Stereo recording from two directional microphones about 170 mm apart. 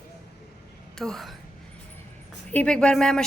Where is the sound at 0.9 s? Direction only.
Centre (ahead or behind).